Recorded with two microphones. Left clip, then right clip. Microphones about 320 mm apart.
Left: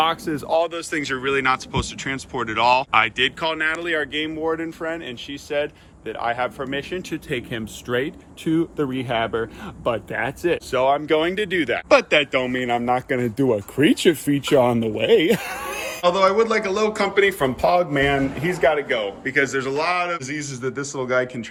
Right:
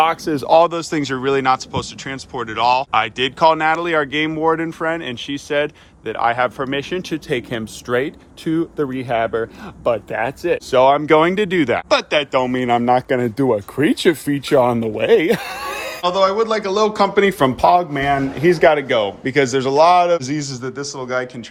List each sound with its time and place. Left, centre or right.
0.3 s speech: right; by 10.6 s centre
10.7 s speech: right
11.9 s speech: centre
12.5 s speech: right
13.1 s speech: centre
17.2 s speech: right
17.6 s speech: centre
18.4 s speech: right; by 21.2 s centre